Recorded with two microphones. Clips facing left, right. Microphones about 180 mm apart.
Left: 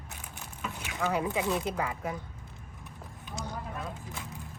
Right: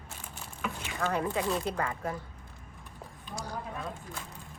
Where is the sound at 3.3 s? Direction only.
20° left (ahead or behind).